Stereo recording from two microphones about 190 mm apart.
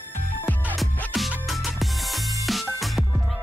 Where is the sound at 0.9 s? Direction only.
5° left (ahead or behind).